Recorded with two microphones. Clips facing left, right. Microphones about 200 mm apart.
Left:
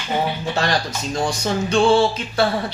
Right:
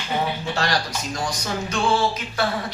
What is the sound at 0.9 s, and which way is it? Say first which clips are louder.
Speech: left 5 dB; 25° left (ahead or behind).